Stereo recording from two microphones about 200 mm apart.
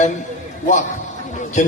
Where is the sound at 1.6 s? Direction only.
35° left (ahead or behind).